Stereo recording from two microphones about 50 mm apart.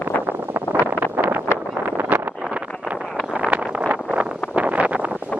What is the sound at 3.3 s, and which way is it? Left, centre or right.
Wind noise, right.